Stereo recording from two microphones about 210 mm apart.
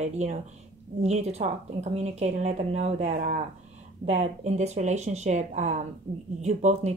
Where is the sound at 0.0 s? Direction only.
35° right (ahead or behind).